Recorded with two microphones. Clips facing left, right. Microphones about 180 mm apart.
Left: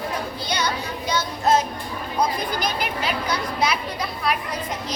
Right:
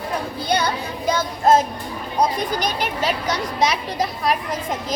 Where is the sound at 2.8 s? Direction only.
40° right (ahead or behind).